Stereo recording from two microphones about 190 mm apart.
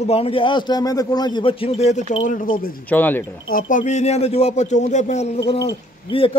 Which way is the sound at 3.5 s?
40° left (ahead or behind).